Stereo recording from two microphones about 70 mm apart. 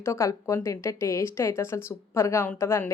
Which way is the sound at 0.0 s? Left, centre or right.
Left.